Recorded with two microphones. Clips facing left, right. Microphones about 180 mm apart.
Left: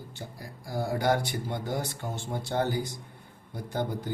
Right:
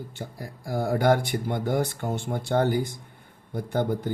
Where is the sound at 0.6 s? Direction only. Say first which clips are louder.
Right 5 dB; 55° right (ahead or behind).